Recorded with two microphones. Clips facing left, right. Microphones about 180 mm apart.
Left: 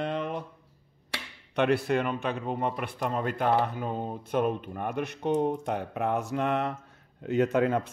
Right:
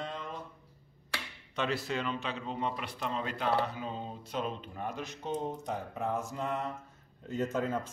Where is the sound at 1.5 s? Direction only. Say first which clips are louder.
Left 9 dB; 60° left (ahead or behind).